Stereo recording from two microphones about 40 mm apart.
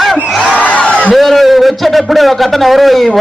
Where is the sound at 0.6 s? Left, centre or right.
Left.